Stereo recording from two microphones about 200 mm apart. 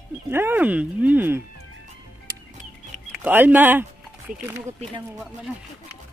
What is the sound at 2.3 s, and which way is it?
Music, 15° right (ahead or behind).